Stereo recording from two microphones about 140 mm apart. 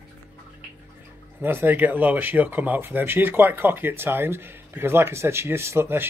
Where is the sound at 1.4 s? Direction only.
15° right (ahead or behind).